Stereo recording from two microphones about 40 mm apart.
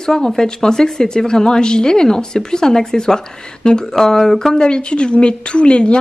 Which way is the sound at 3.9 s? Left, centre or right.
Centre.